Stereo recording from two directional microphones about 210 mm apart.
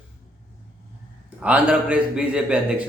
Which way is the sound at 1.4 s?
5° right (ahead or behind).